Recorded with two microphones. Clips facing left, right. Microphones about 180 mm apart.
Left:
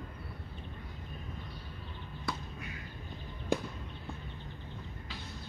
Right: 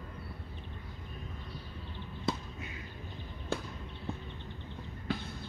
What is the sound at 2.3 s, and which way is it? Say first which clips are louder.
Basketball bounce: right 4 dB; 25° right (ahead or behind).